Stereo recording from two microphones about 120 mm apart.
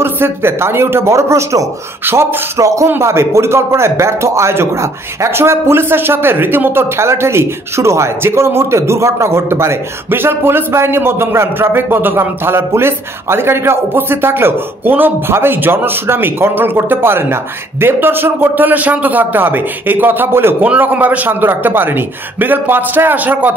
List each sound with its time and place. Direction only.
0.0 s a man's voice: 20° right (ahead or behind)